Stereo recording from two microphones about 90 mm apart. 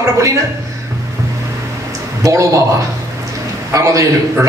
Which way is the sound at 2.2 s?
35° right (ahead or behind).